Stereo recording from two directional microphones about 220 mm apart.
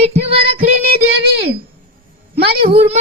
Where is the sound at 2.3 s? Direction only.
45° right (ahead or behind).